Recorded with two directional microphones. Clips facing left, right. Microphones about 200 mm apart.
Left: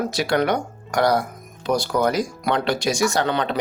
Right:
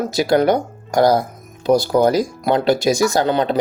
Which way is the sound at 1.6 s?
35° right (ahead or behind).